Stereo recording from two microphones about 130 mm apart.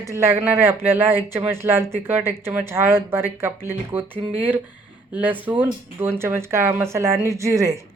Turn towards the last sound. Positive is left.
turn(degrees=-25)  # may be behind; listen again after turning